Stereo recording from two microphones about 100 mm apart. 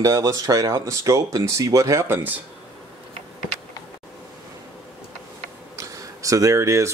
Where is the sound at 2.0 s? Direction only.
20° right (ahead or behind).